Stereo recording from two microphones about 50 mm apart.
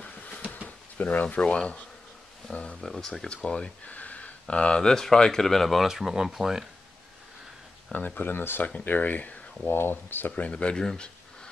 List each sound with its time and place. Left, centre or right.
0.0 s a sound: left
0.5 s speech: left
3.8 s speech: left; by 5.9 s centre
5.9 s speech: centre
7.9 s speech: left
8.3 s speech: left
8.7 s speech: left
9.7 s speech: left
10.3 s speech: left